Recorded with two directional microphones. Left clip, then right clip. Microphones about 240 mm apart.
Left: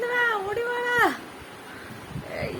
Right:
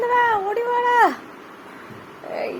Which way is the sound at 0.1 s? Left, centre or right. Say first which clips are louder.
Right 6 dB; centre.